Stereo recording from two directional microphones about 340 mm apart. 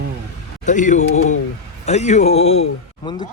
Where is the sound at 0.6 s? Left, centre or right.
Left.